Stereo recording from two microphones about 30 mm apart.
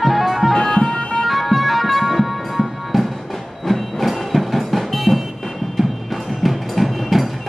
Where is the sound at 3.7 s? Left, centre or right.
Centre.